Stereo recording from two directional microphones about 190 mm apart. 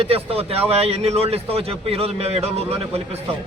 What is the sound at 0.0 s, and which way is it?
A man's voice, 30° right (ahead or behind).